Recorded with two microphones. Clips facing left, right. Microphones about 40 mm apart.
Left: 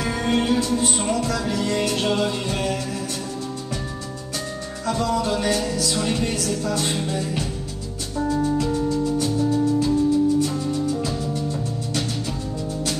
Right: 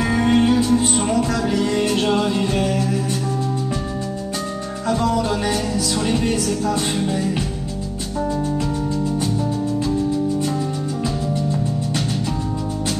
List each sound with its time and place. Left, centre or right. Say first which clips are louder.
0.0 s music: right 5 dB; centre
4.8 s music: right 3 dB; centre
9.2 s music: left 1 dB; centre